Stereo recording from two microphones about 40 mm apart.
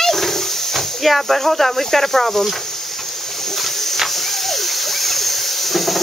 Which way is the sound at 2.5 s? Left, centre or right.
Centre.